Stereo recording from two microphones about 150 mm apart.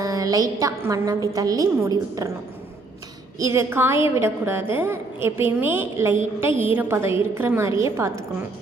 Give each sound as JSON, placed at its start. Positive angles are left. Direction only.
{"t": 0.0, "sound": "a woman's voice", "side_deg": -25}
{"t": 3.3, "sound": "a woman's voice", "side_deg": -20}